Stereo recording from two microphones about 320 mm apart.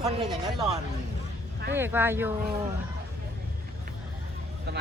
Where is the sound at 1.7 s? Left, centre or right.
Centre.